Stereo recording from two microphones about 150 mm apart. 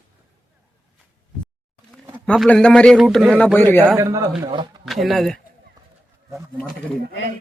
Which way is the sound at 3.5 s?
15° left (ahead or behind).